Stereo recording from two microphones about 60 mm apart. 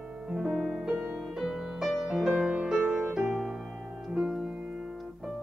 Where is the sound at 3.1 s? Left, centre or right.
Centre.